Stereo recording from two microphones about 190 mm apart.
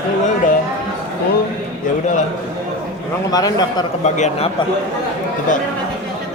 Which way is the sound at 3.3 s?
20° left (ahead or behind).